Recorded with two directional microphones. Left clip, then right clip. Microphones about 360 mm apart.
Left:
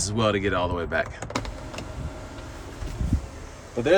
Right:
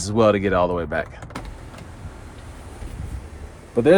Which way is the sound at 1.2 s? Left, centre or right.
Left.